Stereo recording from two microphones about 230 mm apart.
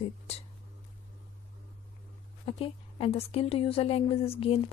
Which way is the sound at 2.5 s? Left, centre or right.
Left.